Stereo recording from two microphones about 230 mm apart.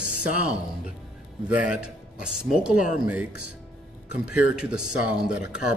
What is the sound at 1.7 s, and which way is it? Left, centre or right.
A man's voice, centre.